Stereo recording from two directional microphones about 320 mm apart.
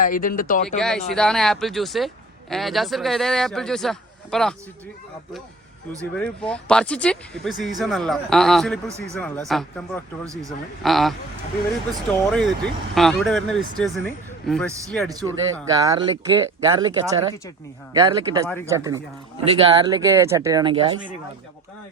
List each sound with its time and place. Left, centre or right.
0.0 s speech: left
0.8 s speech: centre
6.1 s speech: centre
12.2 s speech: centre
15.1 s speech: centre